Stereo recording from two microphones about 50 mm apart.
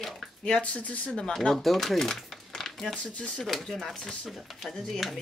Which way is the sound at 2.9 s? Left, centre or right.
Left.